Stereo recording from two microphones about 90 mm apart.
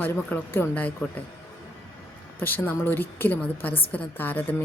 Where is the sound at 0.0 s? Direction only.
20° left (ahead or behind).